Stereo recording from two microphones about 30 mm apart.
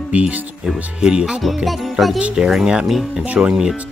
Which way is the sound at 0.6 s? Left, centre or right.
Right.